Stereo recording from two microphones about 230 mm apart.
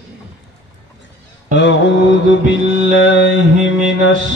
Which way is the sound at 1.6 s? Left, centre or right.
Left.